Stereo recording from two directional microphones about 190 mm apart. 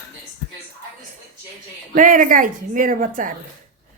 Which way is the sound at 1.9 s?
45° right (ahead or behind).